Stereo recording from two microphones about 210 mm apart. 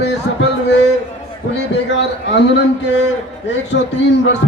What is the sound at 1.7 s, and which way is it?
Speech, 55° left (ahead or behind).